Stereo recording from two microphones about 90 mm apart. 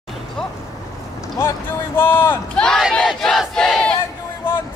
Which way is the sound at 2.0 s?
25° left (ahead or behind).